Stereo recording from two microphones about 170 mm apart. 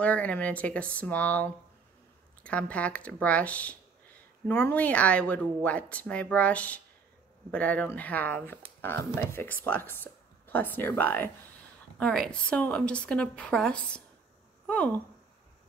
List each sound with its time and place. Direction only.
0.0 s a woman's voice: 10° left (ahead or behind)